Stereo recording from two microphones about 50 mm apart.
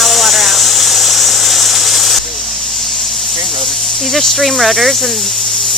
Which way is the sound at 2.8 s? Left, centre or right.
Centre.